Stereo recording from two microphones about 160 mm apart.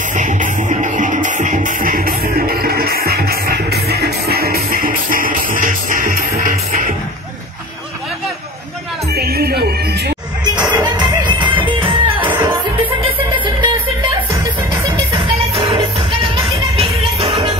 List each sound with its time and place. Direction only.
0.1 s music: 50° right (ahead or behind)
9.1 s music: 80° right
10.5 s music: 30° right (ahead or behind)
17.2 s music: 30° right (ahead or behind)